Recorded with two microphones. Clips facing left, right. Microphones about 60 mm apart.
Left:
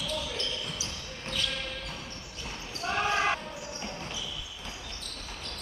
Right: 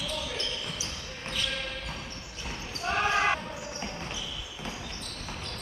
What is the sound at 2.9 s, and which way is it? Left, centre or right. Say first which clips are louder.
Basketball bounce: right 2 dB; centre.